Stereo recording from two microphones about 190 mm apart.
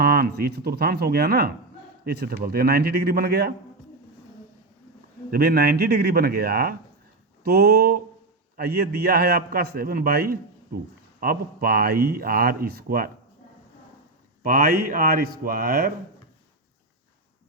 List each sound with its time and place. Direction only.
0.0 s speech: 50° right (ahead or behind)
5.3 s speech: 55° right (ahead or behind)
14.4 s speech: 50° right (ahead or behind)